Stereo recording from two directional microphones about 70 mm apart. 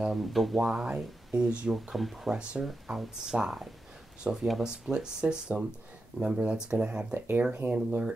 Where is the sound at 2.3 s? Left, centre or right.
Centre.